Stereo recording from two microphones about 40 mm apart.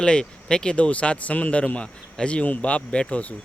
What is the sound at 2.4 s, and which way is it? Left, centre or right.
Speech, left.